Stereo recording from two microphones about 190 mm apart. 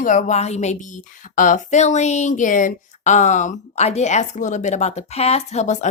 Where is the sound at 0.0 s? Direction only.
45° left (ahead or behind).